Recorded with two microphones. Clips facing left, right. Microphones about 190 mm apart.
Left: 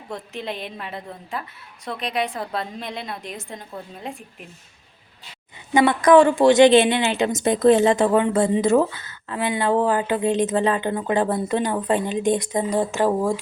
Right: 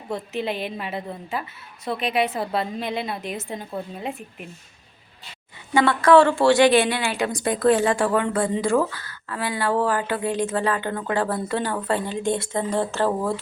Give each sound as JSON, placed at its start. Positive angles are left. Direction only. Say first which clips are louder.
{"t": 0.1, "sound": "a woman's voice", "louder": "right 4 dB", "side_deg": -5}
{"t": 5.7, "sound": "a woman's voice", "louder": "left 2 dB", "side_deg": 20}